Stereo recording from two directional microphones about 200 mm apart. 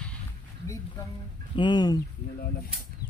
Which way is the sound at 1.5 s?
20° left (ahead or behind).